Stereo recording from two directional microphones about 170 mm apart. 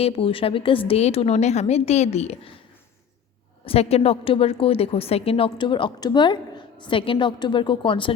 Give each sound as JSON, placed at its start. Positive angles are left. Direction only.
{"t": 0.0, "sound": "a woman's voice", "side_deg": 35}
{"t": 3.7, "sound": "a woman's voice", "side_deg": 35}